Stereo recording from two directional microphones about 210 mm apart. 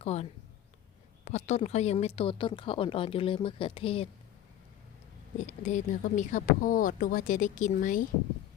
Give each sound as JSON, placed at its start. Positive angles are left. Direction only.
{"t": 0.0, "sound": "a woman's voice", "side_deg": 30}
{"t": 5.6, "sound": "speech", "side_deg": 35}